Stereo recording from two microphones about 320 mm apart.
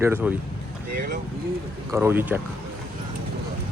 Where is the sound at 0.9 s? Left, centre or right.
Right.